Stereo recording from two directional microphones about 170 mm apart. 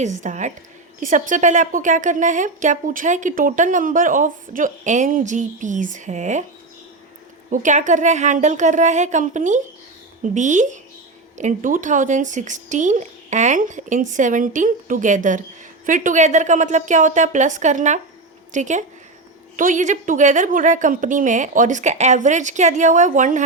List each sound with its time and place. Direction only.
0.0 s a woman's voice: 45° right (ahead or behind)
7.5 s a woman's voice: 50° right (ahead or behind)